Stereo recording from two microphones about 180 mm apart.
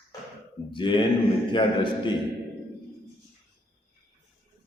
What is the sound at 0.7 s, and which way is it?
A man's voice, 25° left (ahead or behind).